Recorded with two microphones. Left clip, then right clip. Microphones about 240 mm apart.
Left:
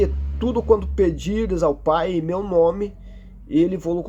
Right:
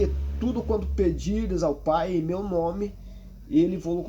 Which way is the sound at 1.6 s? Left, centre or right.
Centre.